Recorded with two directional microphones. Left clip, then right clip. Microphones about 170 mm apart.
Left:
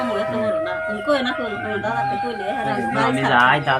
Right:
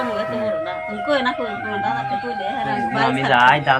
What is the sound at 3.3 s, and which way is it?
Speech, centre (ahead or behind).